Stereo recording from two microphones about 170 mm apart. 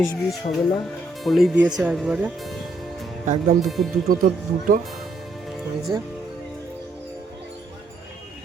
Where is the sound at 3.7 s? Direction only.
Centre (ahead or behind).